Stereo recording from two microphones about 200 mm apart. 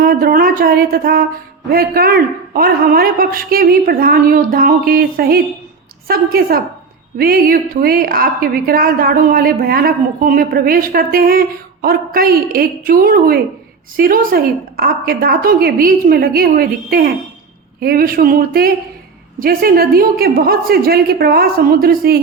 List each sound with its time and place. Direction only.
0.0 s a woman's voice: 45° right (ahead or behind)